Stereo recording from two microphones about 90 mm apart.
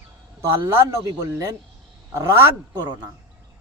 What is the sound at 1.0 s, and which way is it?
Speech, 35° right (ahead or behind).